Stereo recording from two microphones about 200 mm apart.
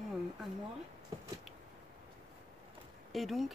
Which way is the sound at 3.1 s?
Centre (ahead or behind).